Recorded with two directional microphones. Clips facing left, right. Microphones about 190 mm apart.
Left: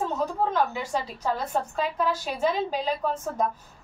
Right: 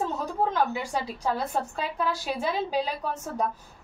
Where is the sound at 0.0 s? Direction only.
10° right (ahead or behind).